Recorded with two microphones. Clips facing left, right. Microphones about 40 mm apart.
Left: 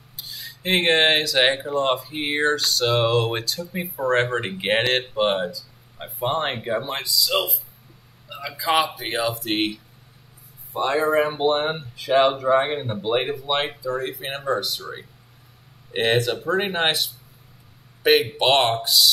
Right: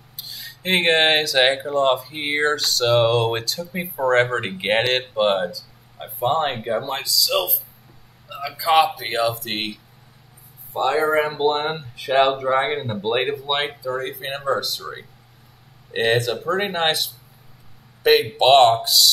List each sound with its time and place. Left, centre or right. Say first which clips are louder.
0.2 s speech: even; centre